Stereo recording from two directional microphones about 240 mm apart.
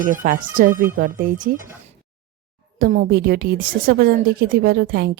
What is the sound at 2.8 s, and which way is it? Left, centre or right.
A woman's voice, right.